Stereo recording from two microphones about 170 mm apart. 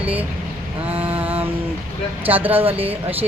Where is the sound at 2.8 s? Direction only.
10° right (ahead or behind).